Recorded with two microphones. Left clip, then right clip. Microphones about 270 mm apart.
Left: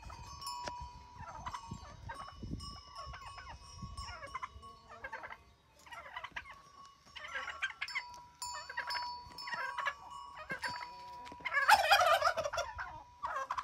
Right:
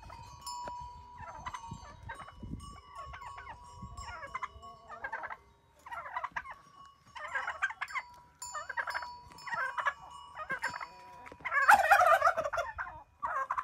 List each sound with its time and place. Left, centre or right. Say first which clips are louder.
1.1 s fowl: right 1 dB; right; by 5.4 s centre
5.9 s turkey: right 7 dB; centre
7.2 s fowl: right 5 dB; centre
12.2 s gobble: right 4 dB; centre